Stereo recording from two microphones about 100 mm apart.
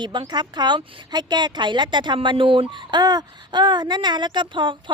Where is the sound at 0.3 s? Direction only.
45° right (ahead or behind).